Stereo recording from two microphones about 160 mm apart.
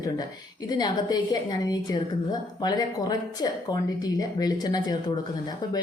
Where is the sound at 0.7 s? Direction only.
25° left (ahead or behind).